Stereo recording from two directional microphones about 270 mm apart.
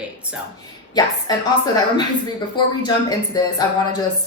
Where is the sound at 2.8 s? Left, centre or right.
Centre.